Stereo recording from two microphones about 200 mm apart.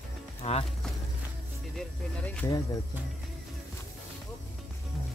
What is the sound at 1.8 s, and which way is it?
Speech, 5° left (ahead or behind).